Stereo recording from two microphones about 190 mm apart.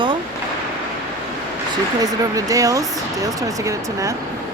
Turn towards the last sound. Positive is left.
turn(degrees=-15)  # may be behind; listen again after turning